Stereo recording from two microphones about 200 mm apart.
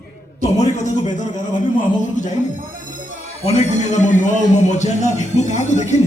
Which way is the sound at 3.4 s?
35° left (ahead or behind).